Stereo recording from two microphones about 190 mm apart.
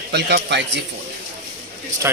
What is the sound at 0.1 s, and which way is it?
Speech, 60° right (ahead or behind).